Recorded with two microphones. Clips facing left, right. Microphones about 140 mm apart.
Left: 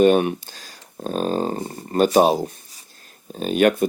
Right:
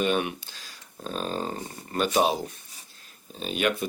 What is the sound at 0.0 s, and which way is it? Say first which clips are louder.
Speech: left 10 dB; 40° left (ahead or behind).